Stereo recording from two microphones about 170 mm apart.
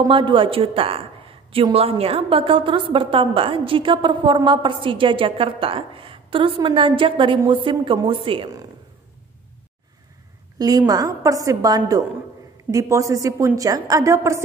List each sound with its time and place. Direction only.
0.0 s a woman's voice: 30° right (ahead or behind)
10.6 s a woman's voice: 20° right (ahead or behind)